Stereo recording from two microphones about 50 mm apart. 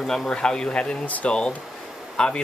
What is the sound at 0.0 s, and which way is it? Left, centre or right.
Speech, centre.